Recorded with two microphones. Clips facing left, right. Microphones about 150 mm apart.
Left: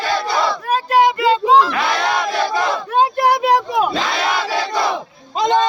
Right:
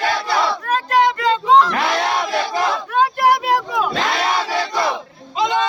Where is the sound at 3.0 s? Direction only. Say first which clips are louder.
Left 1 dB; 20° left (ahead or behind).